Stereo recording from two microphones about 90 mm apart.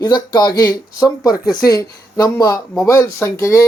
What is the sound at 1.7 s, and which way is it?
Speech, 45° left (ahead or behind).